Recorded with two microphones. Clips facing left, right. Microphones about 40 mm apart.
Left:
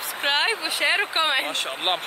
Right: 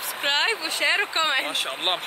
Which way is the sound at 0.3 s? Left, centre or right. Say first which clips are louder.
Left 1 dB; centre.